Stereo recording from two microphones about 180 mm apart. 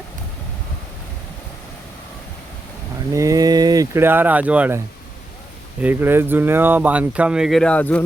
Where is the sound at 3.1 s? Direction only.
20° right (ahead or behind).